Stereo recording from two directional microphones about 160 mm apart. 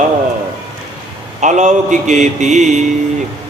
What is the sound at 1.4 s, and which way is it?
Mantra, 50° right (ahead or behind).